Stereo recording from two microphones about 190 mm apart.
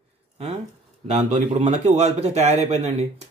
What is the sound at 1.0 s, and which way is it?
Speech, 35° right (ahead or behind).